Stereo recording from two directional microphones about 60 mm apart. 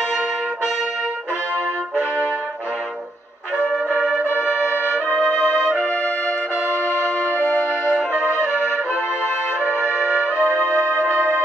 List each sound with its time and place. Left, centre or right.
4.4 s brass instrument: centre
5.3 s music: left
7.3 s music: left
9.7 s music: right